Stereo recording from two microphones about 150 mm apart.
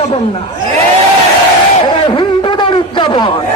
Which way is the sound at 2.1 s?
30° left (ahead or behind).